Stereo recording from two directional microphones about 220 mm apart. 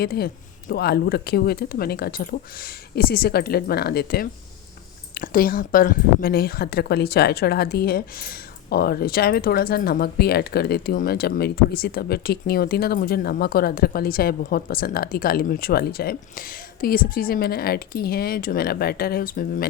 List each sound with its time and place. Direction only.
0.0 s speech: 45° left (ahead or behind)